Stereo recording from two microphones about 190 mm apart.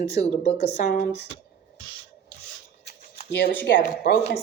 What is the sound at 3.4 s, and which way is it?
Speech, 55° left (ahead or behind).